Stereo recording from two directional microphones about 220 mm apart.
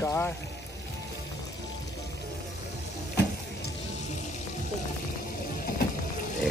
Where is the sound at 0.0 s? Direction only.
15° left (ahead or behind).